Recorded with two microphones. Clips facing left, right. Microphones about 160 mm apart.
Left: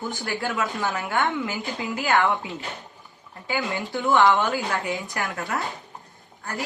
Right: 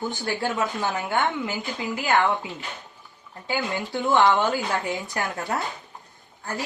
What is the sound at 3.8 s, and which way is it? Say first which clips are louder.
Speech: left 1 dB; 20° right (ahead or behind).